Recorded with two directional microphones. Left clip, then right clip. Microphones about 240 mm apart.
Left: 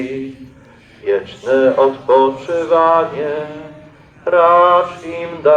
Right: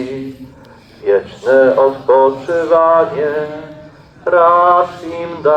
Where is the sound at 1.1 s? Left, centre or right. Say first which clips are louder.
Right 4 dB; right.